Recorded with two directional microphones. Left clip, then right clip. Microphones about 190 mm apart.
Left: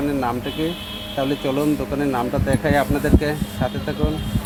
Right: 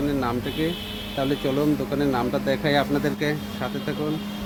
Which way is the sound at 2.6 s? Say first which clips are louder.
Left 4 dB; 10° right (ahead or behind).